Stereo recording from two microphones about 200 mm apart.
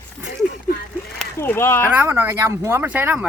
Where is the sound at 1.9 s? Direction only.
10° right (ahead or behind).